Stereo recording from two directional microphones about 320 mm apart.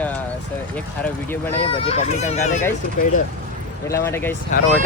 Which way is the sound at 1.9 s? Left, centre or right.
Centre.